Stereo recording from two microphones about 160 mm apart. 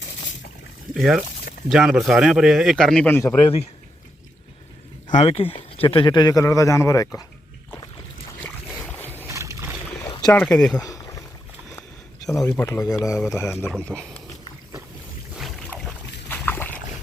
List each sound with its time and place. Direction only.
0.9 s a man's voice: centre (ahead or behind); by 3.5 s 15° left (ahead or behind)
5.1 s speech: 35° left (ahead or behind); by 7.3 s 20° left (ahead or behind)
8.4 s boat: 10° left (ahead or behind)
9.1 s rowboat: 15° right (ahead or behind)
10.0 s boat: 25° left (ahead or behind)
10.3 s a man's voice: 5° left (ahead or behind)
10.8 s rowboat: 25° left (ahead or behind)
12.5 s speech: 15° left (ahead or behind)
15.4 s boat: centre (ahead or behind)
16.3 s a sound: 10° left (ahead or behind)